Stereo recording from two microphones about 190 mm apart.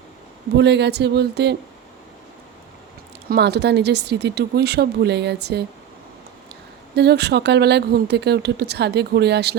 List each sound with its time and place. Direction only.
0.5 s speech: 65° right (ahead or behind)
3.2 s speech: 60° right (ahead or behind)
6.9 s speech: 60° right (ahead or behind)